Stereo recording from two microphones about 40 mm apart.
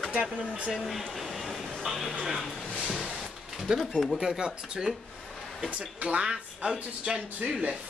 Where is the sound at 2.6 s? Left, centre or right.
Centre.